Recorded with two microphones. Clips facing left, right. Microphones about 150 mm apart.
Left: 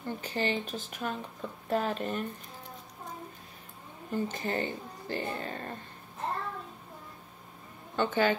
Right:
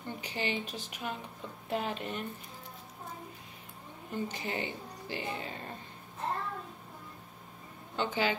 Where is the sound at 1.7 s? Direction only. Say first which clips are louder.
Left 4 dB; 45° left (ahead or behind).